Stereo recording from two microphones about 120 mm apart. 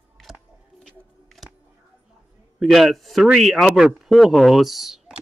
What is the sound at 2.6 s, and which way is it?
Speech, centre (ahead or behind).